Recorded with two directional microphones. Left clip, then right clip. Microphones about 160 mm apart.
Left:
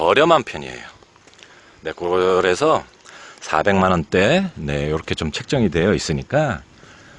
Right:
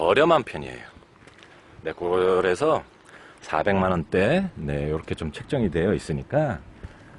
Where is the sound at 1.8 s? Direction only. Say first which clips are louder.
Left 4 dB; 60° left (ahead or behind).